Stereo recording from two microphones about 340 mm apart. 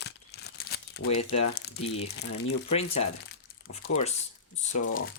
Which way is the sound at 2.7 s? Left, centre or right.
Centre.